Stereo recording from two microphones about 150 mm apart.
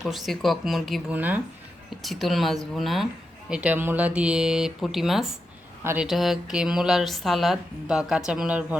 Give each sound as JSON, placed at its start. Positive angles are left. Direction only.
{"t": 0.0, "sound": "a woman's voice", "side_deg": 0}
{"t": 1.1, "sound": "speech", "side_deg": -10}
{"t": 2.0, "sound": "a woman's voice", "side_deg": 0}
{"t": 5.8, "sound": "speech", "side_deg": -15}
{"t": 6.1, "sound": "a woman's voice", "side_deg": 0}